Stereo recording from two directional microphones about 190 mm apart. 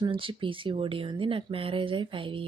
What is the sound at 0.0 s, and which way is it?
Speech, 25° right (ahead or behind).